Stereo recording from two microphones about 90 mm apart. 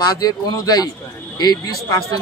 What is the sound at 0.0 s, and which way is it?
Speech, 45° left (ahead or behind).